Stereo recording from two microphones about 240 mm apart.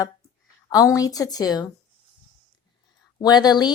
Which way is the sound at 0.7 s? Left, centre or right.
Centre.